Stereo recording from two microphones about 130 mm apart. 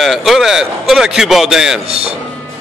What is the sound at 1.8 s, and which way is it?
Speech, 50° right (ahead or behind).